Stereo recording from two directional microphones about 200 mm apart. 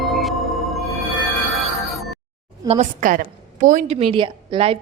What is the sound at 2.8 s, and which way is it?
A woman's voice, 40° right (ahead or behind).